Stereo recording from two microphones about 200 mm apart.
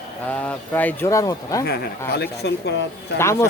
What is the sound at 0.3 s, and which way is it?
Speech, 5° left (ahead or behind).